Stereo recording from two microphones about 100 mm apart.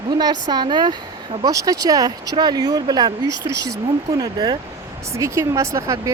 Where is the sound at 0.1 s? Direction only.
45° right (ahead or behind).